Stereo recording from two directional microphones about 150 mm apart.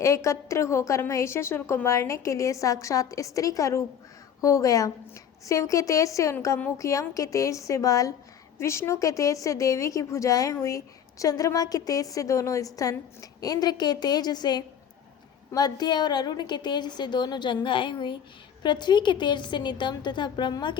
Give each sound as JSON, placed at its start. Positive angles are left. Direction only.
{"t": 0.0, "sound": "a woman's voice", "side_deg": 20}